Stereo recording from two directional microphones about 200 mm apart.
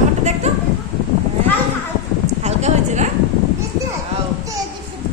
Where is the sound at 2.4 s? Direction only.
35° right (ahead or behind).